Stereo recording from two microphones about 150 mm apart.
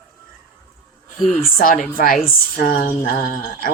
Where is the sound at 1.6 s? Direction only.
65° left (ahead or behind).